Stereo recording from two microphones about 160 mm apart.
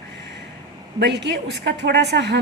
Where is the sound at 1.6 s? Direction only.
90° right.